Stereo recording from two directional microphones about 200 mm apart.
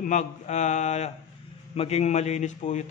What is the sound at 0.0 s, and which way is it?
A man's voice, 35° left (ahead or behind).